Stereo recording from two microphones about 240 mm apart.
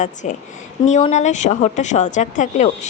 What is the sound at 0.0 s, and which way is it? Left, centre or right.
A woman's voice, left.